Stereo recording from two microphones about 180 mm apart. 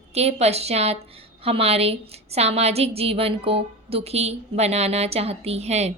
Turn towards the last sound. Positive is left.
turn(degrees=-35)  # may be behind; listen again after turning